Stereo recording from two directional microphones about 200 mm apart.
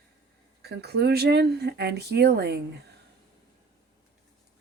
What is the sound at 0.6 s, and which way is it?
Speech, 55° right (ahead or behind).